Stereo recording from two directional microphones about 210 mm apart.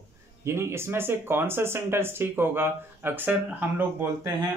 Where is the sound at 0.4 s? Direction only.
15° right (ahead or behind).